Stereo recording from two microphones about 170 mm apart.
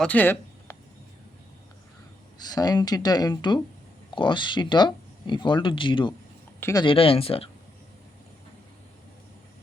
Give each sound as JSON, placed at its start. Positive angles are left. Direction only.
{"t": 0.0, "sound": "a sound", "side_deg": 10}
{"t": 2.4, "sound": "speech", "side_deg": 25}
{"t": 6.6, "sound": "speech", "side_deg": 15}
{"t": 6.8, "sound": "speech", "side_deg": 35}